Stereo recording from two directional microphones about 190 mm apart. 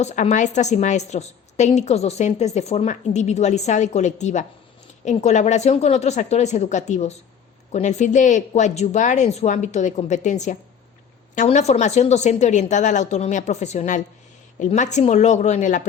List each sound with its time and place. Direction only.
0.0 s a woman's voice: 40° left (ahead or behind)